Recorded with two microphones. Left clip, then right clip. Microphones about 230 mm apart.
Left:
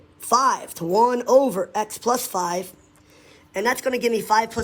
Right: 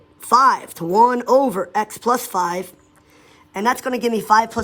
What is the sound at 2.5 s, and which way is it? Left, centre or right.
Speech, right.